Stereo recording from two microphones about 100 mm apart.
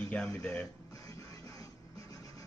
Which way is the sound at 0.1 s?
10° left (ahead or behind).